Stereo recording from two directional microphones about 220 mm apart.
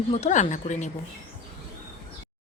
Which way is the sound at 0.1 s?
30° left (ahead or behind).